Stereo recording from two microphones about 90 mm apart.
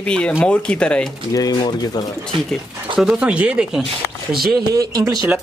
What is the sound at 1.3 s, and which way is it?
Speech, 50° left (ahead or behind).